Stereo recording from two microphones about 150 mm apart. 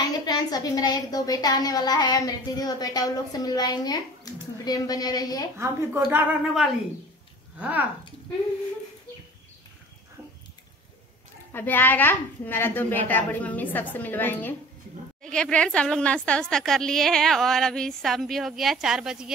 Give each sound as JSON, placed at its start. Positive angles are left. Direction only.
{"t": 0.0, "sound": "a woman's voice", "side_deg": 25}
{"t": 5.6, "sound": "a woman's voice", "side_deg": -15}
{"t": 7.5, "sound": "speech", "side_deg": -10}
{"t": 11.5, "sound": "a woman's voice", "side_deg": 15}